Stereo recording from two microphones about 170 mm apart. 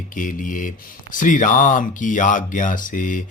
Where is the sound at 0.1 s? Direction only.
50° left (ahead or behind).